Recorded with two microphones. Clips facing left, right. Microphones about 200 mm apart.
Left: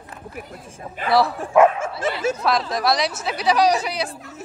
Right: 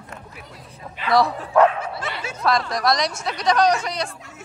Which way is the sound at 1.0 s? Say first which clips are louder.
Left 1 dB; 50° left (ahead or behind).